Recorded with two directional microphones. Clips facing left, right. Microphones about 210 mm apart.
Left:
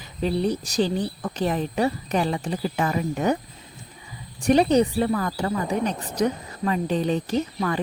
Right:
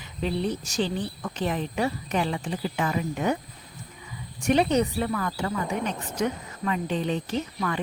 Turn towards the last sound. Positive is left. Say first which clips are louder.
# left 4 dB
turn(degrees=40)  # may be behind; listen again after turning